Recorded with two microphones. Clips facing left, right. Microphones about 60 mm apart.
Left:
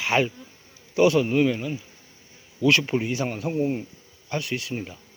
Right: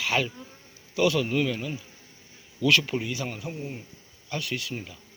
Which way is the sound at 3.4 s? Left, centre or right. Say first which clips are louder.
Left 11 dB; left.